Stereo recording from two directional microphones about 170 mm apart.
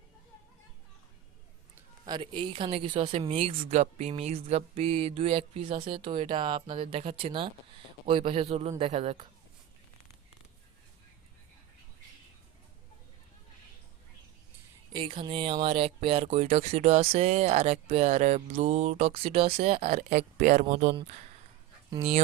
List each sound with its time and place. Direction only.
2.0 s speech: 30° right (ahead or behind)
14.9 s speech: 30° right (ahead or behind)
21.8 s speech: 30° right (ahead or behind)